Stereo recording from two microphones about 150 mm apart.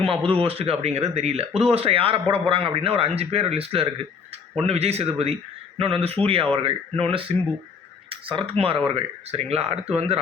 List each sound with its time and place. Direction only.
0.0 s speech: 35° right (ahead or behind)